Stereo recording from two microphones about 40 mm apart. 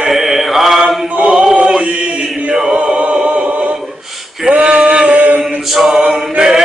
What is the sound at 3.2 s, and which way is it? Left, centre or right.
Synthetic singing, right.